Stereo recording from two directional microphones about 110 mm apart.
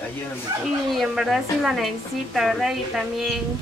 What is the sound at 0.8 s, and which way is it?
Speech, centre (ahead or behind).